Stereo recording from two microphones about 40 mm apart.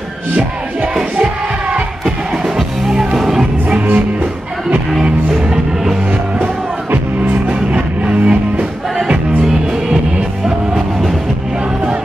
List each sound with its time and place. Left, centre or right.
1.1 s music: right
2.0 s music: centre
3.8 s music: right
8.0 s music: right
9.4 s music: centre